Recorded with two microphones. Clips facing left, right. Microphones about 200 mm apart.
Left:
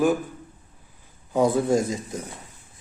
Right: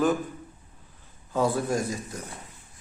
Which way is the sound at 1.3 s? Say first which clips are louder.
Left 5 dB; 20° left (ahead or behind).